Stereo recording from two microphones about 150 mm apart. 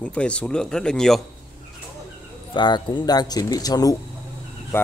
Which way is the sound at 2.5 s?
30° left (ahead or behind).